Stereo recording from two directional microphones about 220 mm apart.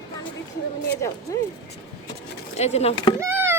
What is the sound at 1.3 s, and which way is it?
Speech, 15° left (ahead or behind).